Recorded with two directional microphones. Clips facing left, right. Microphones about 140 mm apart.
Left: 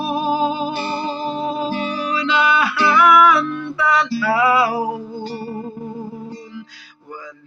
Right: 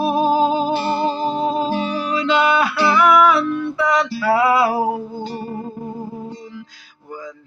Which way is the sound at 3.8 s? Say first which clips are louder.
Left 2 dB; 40° right (ahead or behind).